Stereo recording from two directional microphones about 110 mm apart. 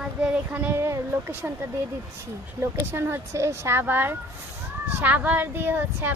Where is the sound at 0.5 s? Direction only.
20° right (ahead or behind).